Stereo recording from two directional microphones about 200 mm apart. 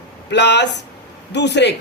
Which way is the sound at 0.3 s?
60° left (ahead or behind).